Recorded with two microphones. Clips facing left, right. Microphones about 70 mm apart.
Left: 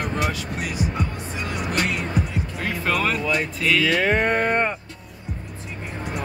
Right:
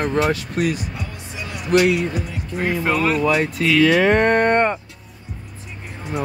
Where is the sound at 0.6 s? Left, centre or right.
Right.